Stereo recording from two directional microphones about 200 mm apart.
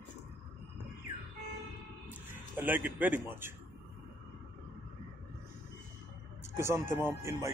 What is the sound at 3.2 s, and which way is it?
Speech, 10° right (ahead or behind).